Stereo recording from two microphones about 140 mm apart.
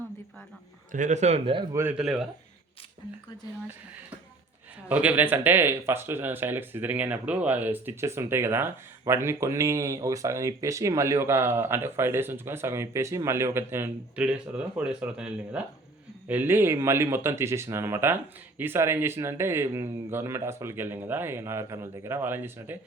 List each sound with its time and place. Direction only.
0.9 s speech: 60° right (ahead or behind)
1.7 s speech: 15° right (ahead or behind)
2.0 s speech: centre (ahead or behind)
4.9 s speech: 10° right (ahead or behind)